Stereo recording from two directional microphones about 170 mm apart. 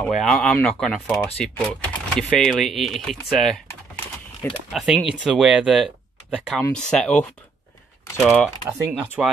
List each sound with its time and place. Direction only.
0.0 s speech: centre (ahead or behind)
4.7 s speech: 5° right (ahead or behind)
9.2 s speech: 5° right (ahead or behind)